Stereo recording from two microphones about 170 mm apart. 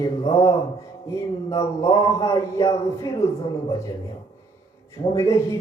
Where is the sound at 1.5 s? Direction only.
20° left (ahead or behind).